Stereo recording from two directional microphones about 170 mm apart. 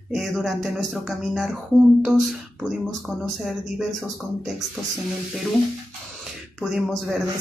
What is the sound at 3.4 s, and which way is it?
Speech, centre (ahead or behind).